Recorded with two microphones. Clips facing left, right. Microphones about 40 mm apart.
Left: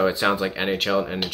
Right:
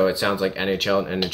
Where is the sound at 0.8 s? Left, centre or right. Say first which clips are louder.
Right 2 dB; centre.